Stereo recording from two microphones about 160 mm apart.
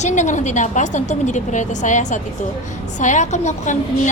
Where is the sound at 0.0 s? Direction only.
50° left (ahead or behind).